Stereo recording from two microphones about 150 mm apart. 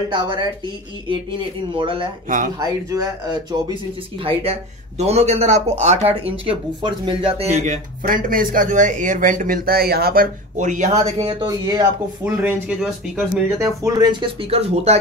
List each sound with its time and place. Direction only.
0.1 s a woman's voice: 30° right (ahead or behind)
1.8 s a woman's voice: 35° right (ahead or behind)
2.2 s speech: 65° right (ahead or behind)
2.6 s speech: 25° right (ahead or behind)
4.2 s a man's voice: 40° right (ahead or behind); by 10.6 s 85° right
10.6 s a man's voice: 55° right (ahead or behind); by 11.8 s 25° right (ahead or behind)
12.3 s speech: 10° right (ahead or behind)
13.5 s speech: 20° right (ahead or behind)
14.5 s a man's voice: 45° right (ahead or behind)